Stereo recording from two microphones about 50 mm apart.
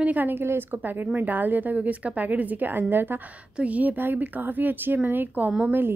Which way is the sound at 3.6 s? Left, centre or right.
Right.